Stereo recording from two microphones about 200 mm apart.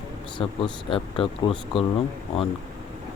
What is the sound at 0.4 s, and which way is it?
Speech, 25° left (ahead or behind).